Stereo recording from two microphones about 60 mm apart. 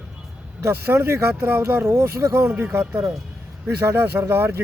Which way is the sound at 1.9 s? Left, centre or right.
Right.